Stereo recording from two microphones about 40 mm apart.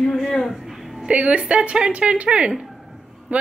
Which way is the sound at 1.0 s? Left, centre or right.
Right.